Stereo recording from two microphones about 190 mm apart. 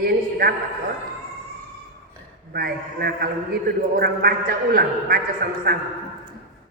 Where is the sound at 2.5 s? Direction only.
55° right (ahead or behind).